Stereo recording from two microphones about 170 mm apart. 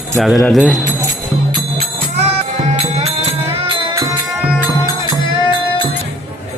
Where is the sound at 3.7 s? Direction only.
30° right (ahead or behind).